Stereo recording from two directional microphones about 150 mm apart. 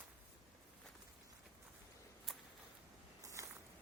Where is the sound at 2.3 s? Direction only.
5° right (ahead or behind).